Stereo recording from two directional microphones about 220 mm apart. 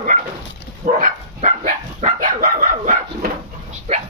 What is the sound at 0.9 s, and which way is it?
Dog, 35° right (ahead or behind).